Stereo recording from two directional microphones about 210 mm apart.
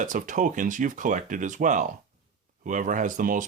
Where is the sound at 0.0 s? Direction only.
40° right (ahead or behind).